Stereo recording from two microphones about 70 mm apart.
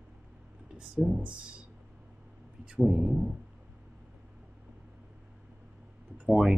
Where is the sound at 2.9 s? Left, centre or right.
Centre.